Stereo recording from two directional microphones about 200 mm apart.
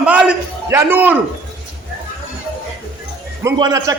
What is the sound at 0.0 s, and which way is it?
A man's voice, 5° right (ahead or behind).